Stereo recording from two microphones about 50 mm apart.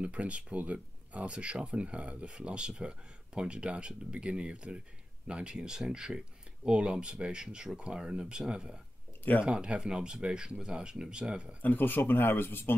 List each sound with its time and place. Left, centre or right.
0.0 s speech: right
11.6 s speech: left